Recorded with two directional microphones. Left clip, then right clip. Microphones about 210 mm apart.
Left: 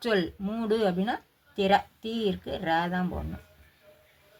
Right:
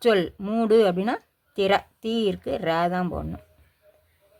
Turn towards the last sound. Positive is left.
turn(degrees=-40)  # may be behind; listen again after turning